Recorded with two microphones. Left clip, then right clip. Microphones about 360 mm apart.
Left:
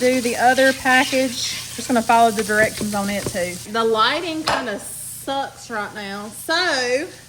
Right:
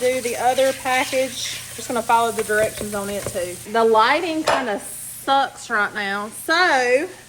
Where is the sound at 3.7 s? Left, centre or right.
Centre.